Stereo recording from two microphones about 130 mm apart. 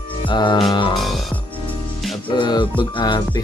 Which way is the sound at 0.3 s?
35° left (ahead or behind).